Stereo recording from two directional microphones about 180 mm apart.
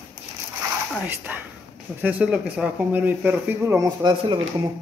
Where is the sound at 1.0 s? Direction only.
10° right (ahead or behind).